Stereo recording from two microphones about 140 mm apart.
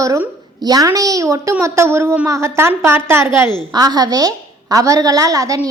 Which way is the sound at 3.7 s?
30° right (ahead or behind).